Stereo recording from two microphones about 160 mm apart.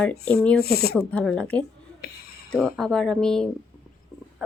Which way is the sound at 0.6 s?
75° left (ahead or behind).